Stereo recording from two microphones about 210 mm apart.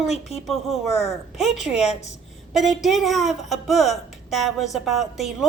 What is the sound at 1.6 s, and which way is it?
Speech, 30° left (ahead or behind).